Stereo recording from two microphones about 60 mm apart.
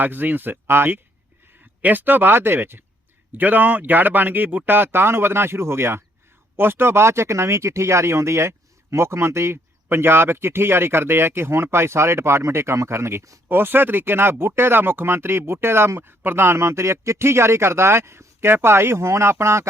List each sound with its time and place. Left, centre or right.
0.0 s speech: right